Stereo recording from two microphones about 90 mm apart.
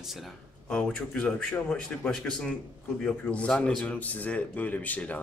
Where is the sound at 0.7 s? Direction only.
10° left (ahead or behind).